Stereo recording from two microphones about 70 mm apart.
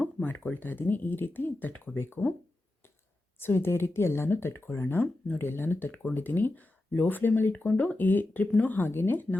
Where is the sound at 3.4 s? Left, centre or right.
Left.